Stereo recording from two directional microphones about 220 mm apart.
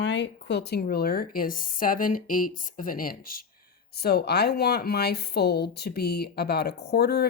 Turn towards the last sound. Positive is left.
turn(degrees=50)  # may be behind; listen again after turning